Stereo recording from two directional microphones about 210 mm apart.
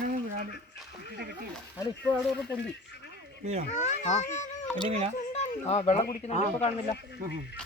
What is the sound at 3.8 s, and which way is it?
Speech, 35° left (ahead or behind).